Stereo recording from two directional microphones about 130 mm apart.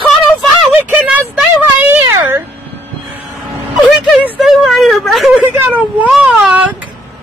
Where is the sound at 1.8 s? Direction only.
20° right (ahead or behind).